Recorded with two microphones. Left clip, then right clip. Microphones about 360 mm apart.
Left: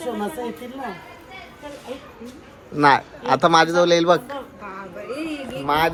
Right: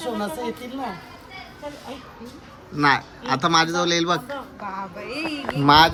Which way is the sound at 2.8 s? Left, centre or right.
Centre.